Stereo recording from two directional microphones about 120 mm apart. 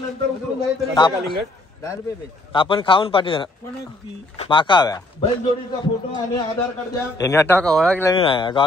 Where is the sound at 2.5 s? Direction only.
45° left (ahead or behind).